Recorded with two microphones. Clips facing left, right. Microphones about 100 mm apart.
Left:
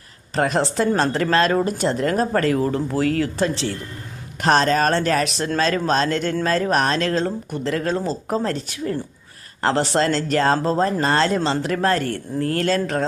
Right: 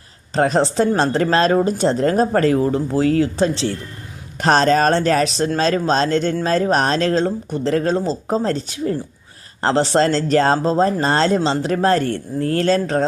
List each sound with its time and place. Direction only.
0.3 s speech: 30° right (ahead or behind)